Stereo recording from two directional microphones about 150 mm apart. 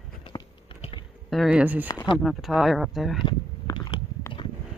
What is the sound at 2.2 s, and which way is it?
Speech, centre (ahead or behind).